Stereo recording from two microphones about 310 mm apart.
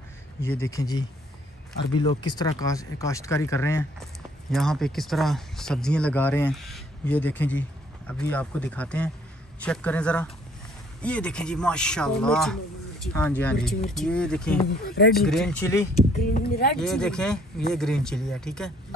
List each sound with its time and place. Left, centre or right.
0.4 s speech: centre
14.7 s speech: left
15.2 s speech: centre
16.3 s speech: left
16.7 s speech: centre